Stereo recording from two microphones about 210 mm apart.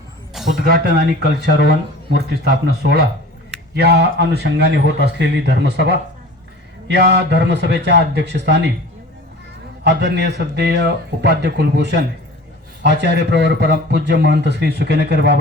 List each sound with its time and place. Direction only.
0.5 s a man's voice: 45° right (ahead or behind)
9.8 s a man's voice: 55° right (ahead or behind)